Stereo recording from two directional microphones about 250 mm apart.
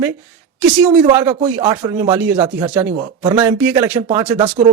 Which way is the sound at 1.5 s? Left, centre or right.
Centre.